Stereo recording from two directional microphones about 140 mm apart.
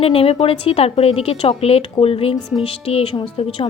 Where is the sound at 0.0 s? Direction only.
45° left (ahead or behind).